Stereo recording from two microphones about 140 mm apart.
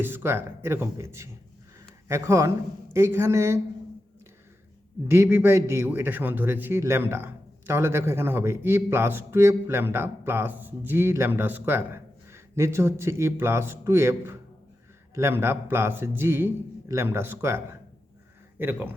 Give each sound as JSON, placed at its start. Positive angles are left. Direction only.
{"t": 0.0, "sound": "speech", "side_deg": -15}
{"t": 5.0, "sound": "a man's voice", "side_deg": -15}
{"t": 18.6, "sound": "a man's voice", "side_deg": -10}